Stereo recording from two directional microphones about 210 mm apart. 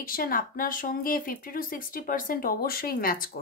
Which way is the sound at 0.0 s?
40° left (ahead or behind).